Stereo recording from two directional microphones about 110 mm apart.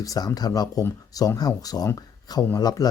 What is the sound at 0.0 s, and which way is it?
Speech, 35° left (ahead or behind).